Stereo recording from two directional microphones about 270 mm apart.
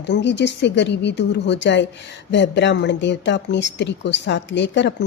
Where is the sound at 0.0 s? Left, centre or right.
Left.